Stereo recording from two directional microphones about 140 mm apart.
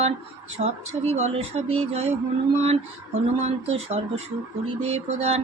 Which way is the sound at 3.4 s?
50° right (ahead or behind).